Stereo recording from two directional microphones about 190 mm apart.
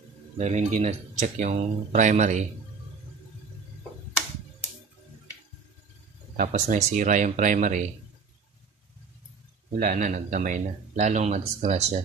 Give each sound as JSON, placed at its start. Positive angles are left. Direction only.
{"t": 0.4, "sound": "speech", "side_deg": -35}
{"t": 6.3, "sound": "speech", "side_deg": -45}
{"t": 9.8, "sound": "speech", "side_deg": -45}